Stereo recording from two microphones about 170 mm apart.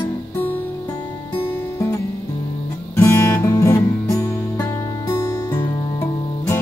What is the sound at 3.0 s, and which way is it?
Music, 15° left (ahead or behind).